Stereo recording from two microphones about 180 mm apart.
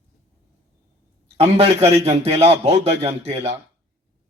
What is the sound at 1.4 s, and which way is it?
A man's voice, 35° right (ahead or behind).